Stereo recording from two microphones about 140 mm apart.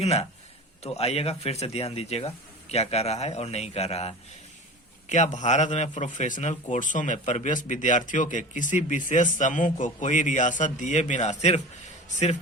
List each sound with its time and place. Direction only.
0.0 s speech: 50° left (ahead or behind)
5.0 s a man's voice: 60° left (ahead or behind)